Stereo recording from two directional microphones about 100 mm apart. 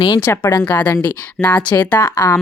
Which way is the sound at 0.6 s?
15° left (ahead or behind).